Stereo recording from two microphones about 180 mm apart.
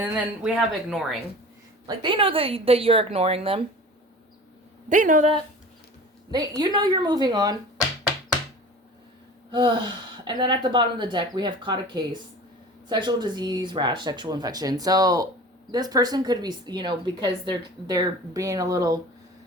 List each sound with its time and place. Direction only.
0.0 s speech: 10° right (ahead or behind)
1.9 s a woman's voice: 25° right (ahead or behind)
4.9 s speech: 45° right (ahead or behind)
6.6 s speech: 25° right (ahead or behind)
9.5 s speech: 25° right (ahead or behind)